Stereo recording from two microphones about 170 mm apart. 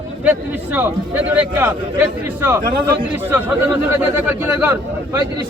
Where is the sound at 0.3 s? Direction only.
10° right (ahead or behind).